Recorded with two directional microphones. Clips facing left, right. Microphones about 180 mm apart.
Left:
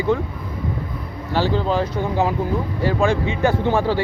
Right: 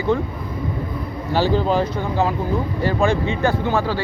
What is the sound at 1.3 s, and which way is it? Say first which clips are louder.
Speech: right 1 dB; 5° right (ahead or behind).